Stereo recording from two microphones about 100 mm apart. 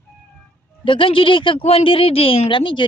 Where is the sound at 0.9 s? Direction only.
60° left (ahead or behind).